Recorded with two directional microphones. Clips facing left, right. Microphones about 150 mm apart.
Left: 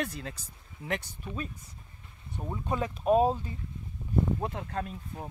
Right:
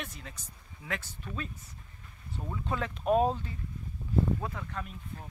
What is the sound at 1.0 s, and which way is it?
Speech, 15° left (ahead or behind).